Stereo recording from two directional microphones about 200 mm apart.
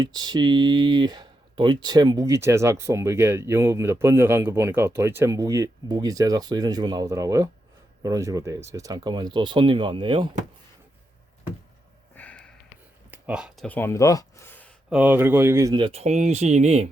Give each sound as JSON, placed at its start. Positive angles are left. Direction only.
{"t": 0.0, "sound": "speech", "side_deg": -20}
{"t": 12.1, "sound": "sniff", "side_deg": 10}
{"t": 13.1, "sound": "a sound", "side_deg": -5}
{"t": 13.7, "sound": "speech", "side_deg": 10}
{"t": 14.8, "sound": "speech", "side_deg": -5}